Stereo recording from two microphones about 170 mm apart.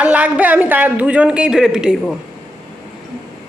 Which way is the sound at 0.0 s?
10° right (ahead or behind).